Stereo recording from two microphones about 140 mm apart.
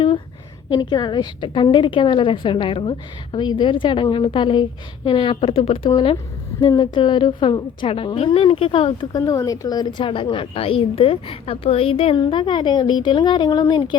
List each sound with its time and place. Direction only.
0.7 s a woman's voice: 30° left (ahead or behind)